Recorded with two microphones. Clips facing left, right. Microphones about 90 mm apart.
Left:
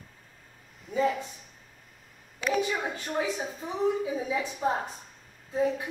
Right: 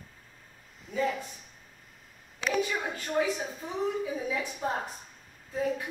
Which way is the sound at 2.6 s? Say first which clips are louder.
Left 1 dB; 20° left (ahead or behind).